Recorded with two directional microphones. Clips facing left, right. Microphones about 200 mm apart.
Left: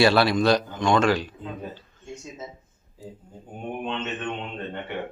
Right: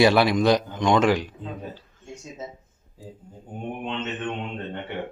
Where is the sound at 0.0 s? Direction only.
15° right (ahead or behind).